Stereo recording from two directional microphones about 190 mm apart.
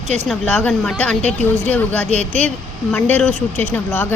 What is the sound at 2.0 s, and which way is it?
Speech, 35° right (ahead or behind).